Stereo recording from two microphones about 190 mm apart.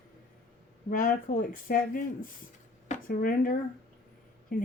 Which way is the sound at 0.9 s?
45° left (ahead or behind).